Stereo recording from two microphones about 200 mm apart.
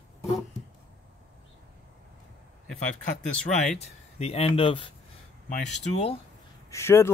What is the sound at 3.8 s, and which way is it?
A man's voice, 30° left (ahead or behind).